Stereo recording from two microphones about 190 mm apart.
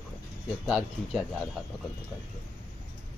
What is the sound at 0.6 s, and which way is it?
Speech, centre (ahead or behind).